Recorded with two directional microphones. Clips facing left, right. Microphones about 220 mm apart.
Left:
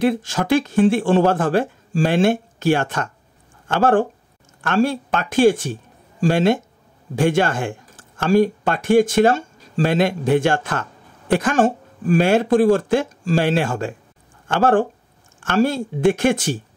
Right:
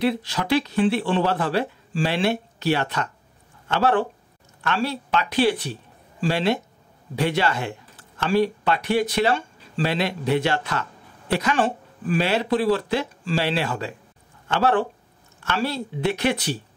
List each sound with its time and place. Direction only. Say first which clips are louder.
0.0 s speech: left 4 dB; 45° left (ahead or behind)